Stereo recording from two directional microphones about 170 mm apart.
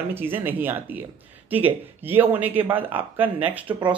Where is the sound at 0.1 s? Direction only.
10° right (ahead or behind).